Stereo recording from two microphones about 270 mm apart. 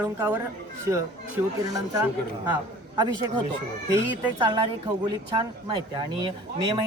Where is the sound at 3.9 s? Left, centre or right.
Centre.